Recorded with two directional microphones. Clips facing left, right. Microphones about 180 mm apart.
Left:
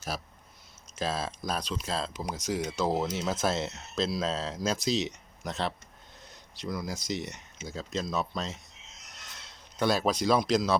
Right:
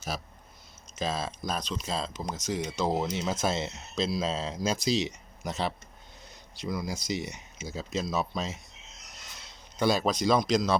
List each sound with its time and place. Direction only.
0.9 s speech: 5° left (ahead or behind)